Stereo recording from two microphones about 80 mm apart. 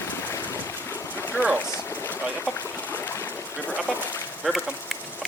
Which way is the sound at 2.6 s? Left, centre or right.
Left.